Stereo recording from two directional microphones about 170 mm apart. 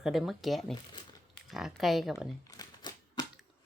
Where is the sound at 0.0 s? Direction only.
Centre (ahead or behind).